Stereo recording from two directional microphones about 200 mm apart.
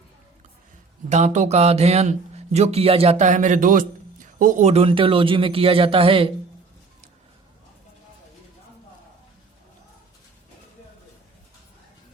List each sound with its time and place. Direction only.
1.1 s speech: 35° right (ahead or behind)